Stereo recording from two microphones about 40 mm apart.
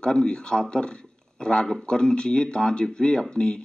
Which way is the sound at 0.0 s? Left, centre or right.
Centre.